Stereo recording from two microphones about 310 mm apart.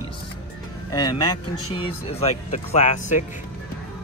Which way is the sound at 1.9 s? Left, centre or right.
Centre.